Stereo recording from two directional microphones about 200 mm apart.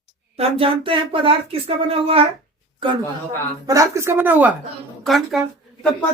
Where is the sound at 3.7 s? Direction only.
15° right (ahead or behind); by 5.4 s centre (ahead or behind).